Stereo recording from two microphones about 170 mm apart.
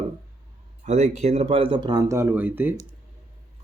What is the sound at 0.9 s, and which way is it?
A man's voice, 40° right (ahead or behind).